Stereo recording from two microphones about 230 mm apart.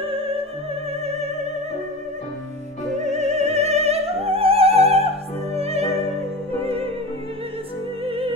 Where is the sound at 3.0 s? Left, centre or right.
Right.